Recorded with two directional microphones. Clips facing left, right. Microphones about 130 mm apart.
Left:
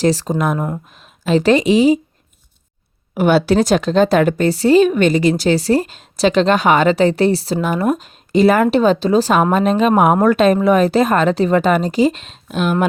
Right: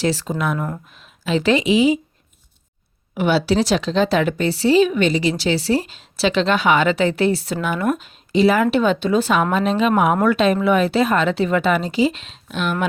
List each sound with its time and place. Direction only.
0.0 s a woman's voice: 40° left (ahead or behind)
3.2 s a woman's voice: 50° left (ahead or behind)